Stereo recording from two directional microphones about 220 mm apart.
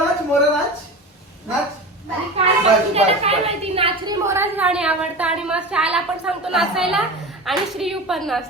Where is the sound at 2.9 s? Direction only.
25° right (ahead or behind).